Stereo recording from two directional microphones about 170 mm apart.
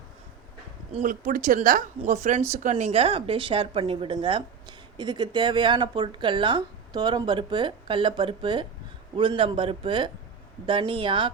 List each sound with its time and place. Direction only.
1.0 s a woman's voice: 50° right (ahead or behind); by 11.3 s 30° right (ahead or behind)